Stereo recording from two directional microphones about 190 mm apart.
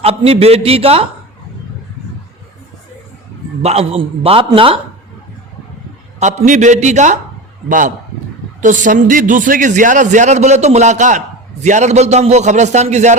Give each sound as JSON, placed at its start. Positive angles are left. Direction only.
{"t": 0.0, "sound": "a man's voice", "side_deg": -30}
{"t": 3.6, "sound": "a man's voice", "side_deg": -35}
{"t": 6.1, "sound": "a man's voice", "side_deg": -40}